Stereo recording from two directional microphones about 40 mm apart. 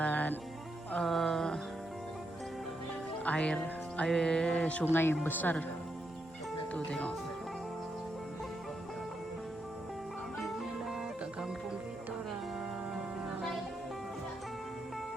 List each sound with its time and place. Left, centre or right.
0.0 s music: left
0.9 s music: centre
3.2 s music: left
4.1 s music: centre
4.9 s speech: left
5.2 s speech: left
6.7 s speech: left